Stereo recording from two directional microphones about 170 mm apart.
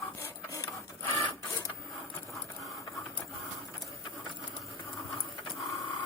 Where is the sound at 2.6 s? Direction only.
Centre (ahead or behind).